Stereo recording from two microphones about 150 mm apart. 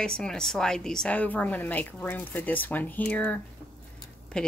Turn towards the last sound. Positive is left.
turn(degrees=5)  # may be behind; listen again after turning